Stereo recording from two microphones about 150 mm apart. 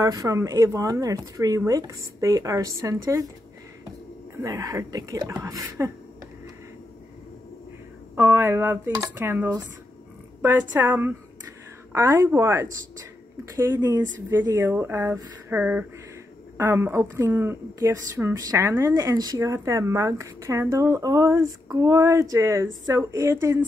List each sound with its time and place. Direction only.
0.0 s speech: 25° right (ahead or behind)
4.4 s speech: 20° right (ahead or behind)
8.2 s speech: 15° right (ahead or behind)
14.3 s speech: 15° right (ahead or behind)